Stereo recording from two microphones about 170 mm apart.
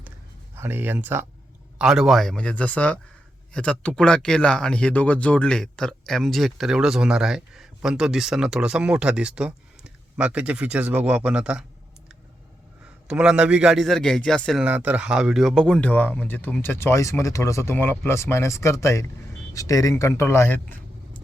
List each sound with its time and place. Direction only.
0.5 s speech: 15° right (ahead or behind)
13.1 s a man's voice: 5° right (ahead or behind); by 20.6 s 15° left (ahead or behind)